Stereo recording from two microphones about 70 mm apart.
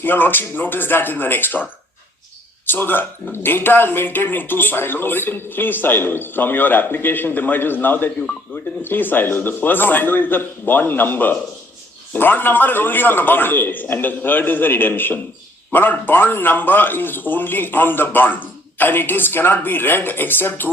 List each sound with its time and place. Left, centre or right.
0.0 s speech: left
2.6 s speech: left